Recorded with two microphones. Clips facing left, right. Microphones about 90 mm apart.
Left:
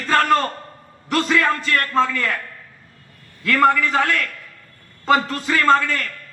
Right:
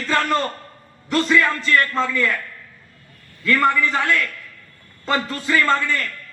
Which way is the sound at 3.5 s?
55° left (ahead or behind).